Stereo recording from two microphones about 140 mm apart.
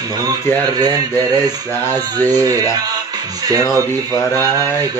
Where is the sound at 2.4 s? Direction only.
25° right (ahead or behind).